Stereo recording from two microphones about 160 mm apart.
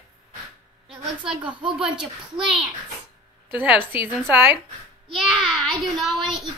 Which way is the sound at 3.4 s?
10° right (ahead or behind).